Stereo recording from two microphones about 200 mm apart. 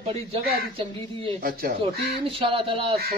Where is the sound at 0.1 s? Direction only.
30° right (ahead or behind).